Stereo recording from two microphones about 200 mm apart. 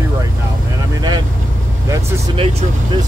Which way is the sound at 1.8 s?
25° right (ahead or behind).